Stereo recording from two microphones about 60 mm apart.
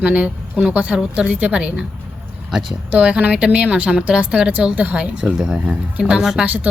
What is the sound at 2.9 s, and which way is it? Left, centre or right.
A woman's voice, centre.